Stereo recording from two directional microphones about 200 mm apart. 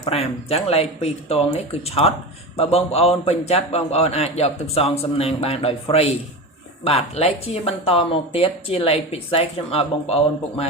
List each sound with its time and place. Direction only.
0.0 s a man's voice: 30° left (ahead or behind)